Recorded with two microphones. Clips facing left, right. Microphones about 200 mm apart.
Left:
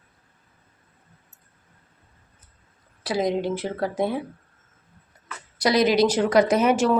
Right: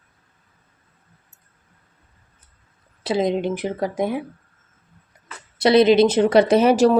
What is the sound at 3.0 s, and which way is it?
Speech, 25° right (ahead or behind).